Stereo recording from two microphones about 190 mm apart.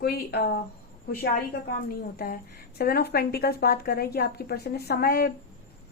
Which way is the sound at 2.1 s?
50° left (ahead or behind).